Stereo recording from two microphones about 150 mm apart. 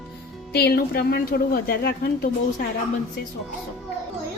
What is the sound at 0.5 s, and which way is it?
A woman's voice, 90° left.